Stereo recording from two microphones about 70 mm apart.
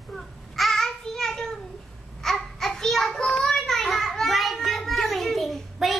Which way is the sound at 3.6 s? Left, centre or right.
Centre.